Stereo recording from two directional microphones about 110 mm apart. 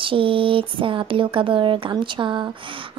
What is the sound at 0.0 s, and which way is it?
A woman's voice, 55° right (ahead or behind).